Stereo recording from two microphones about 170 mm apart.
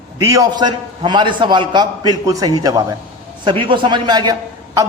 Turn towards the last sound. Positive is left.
turn(degrees=-25)  # may be behind; listen again after turning